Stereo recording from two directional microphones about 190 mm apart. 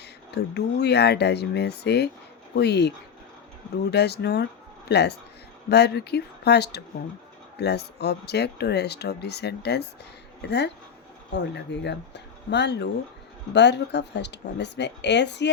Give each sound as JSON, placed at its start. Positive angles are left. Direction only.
{"t": 0.3, "sound": "speech", "side_deg": 60}
{"t": 3.9, "sound": "speech", "side_deg": 60}